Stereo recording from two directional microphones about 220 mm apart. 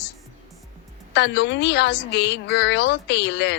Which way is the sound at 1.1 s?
50° left (ahead or behind).